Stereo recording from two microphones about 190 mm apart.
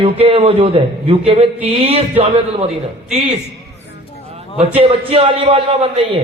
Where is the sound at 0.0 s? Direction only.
30° right (ahead or behind).